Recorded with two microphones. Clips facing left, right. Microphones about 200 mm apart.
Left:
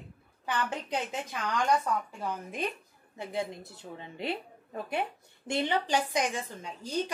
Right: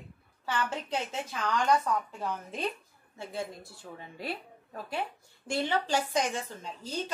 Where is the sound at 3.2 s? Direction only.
20° left (ahead or behind).